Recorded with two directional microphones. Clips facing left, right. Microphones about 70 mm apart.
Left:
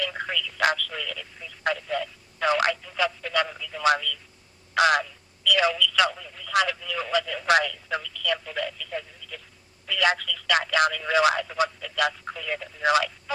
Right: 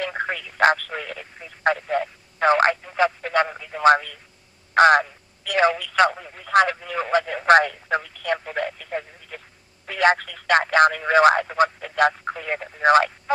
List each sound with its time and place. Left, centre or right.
0.0 s speech: right